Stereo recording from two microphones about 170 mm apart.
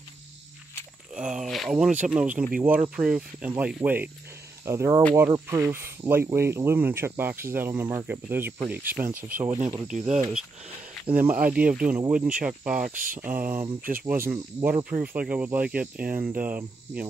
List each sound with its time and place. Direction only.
1.1 s speech: 5° right (ahead or behind)
9.8 s speech: 45° right (ahead or behind)
11.4 s speech: 5° right (ahead or behind)
16.1 s speech: 60° right (ahead or behind)
16.3 s speech: 10° right (ahead or behind)